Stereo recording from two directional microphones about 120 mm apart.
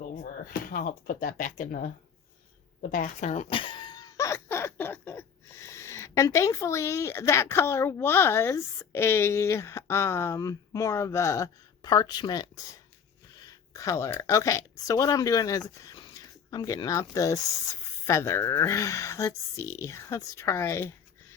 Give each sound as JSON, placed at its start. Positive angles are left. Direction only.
{"t": 1.4, "sound": "speech", "side_deg": 90}
{"t": 2.9, "sound": "speech", "side_deg": 85}
{"t": 3.5, "sound": "cough", "side_deg": 45}
{"t": 4.2, "sound": "a sound", "side_deg": 20}
{"t": 13.4, "sound": "speech", "side_deg": 30}